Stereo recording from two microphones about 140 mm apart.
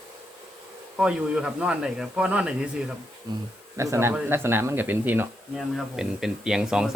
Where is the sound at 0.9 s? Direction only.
5° right (ahead or behind).